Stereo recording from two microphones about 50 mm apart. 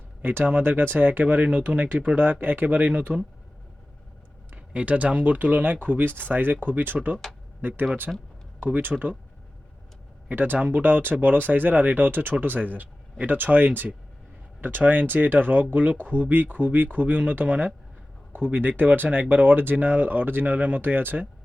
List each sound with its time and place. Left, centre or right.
0.2 s speech: right
4.5 s speech: right
8.1 s speech: centre
8.6 s speech: right
10.2 s speech: right
20.4 s speech: right